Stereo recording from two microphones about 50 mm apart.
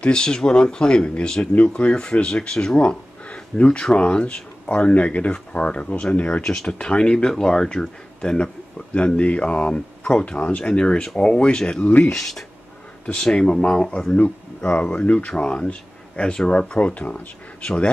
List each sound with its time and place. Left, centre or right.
0.0 s speech: centre
12.1 s speech: centre
13.0 s speech: centre